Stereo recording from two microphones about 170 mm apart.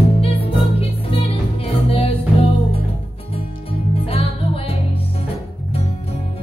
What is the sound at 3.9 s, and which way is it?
Music, 35° left (ahead or behind).